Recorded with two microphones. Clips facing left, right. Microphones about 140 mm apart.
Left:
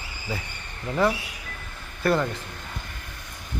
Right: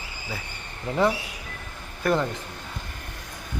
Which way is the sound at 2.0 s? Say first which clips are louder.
Left 1 dB; 15° right (ahead or behind).